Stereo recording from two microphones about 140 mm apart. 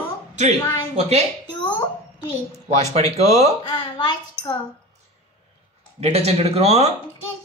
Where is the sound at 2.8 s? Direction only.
50° right (ahead or behind).